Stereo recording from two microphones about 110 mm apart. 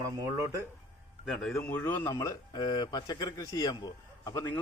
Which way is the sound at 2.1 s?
30° left (ahead or behind).